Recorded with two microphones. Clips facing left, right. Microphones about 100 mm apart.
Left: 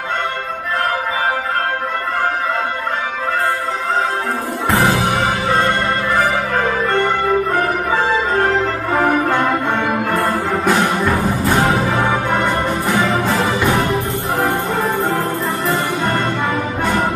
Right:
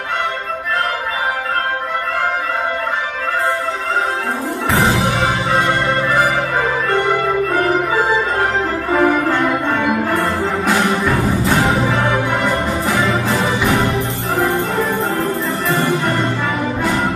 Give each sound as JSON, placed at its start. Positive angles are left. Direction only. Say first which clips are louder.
{"t": 8.9, "sound": "music", "louder": "right 1 dB", "side_deg": 10}
{"t": 14.4, "sound": "music", "louder": "right 1 dB", "side_deg": 30}